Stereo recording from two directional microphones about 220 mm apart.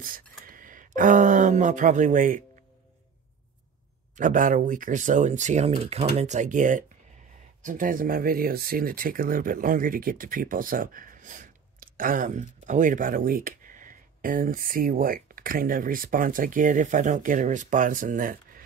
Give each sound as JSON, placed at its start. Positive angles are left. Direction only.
{"t": 0.0, "sound": "speech", "side_deg": -40}
{"t": 4.1, "sound": "speech", "side_deg": -35}